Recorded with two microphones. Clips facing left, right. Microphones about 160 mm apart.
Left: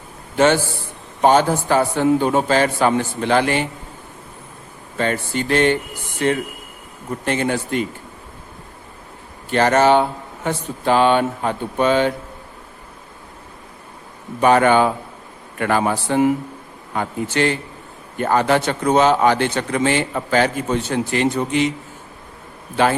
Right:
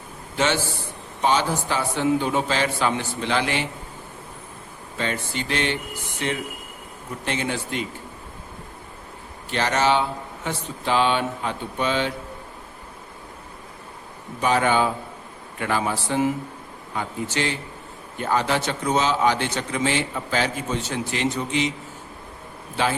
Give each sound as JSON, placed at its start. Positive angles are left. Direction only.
{"t": 0.3, "sound": "a man's voice", "side_deg": 50}
{"t": 4.9, "sound": "speech", "side_deg": 50}
{"t": 9.5, "sound": "speech", "side_deg": 50}
{"t": 14.4, "sound": "a man's voice", "side_deg": 60}